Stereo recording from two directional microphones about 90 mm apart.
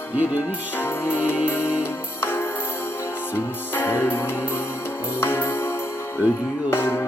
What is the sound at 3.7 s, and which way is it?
Music, 25° left (ahead or behind).